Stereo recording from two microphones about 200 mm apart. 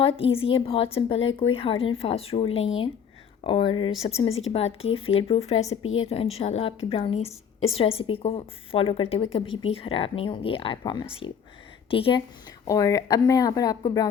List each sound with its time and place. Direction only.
0.0 s a woman's voice: 30° left (ahead or behind)
5.7 s a woman's voice: 90° left
6.1 s a woman's voice: 30° left (ahead or behind)